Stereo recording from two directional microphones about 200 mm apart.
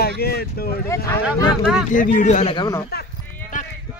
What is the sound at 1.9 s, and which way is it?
Speech, 40° left (ahead or behind).